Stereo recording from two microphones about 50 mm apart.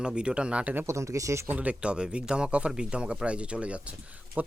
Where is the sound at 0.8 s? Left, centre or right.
Right.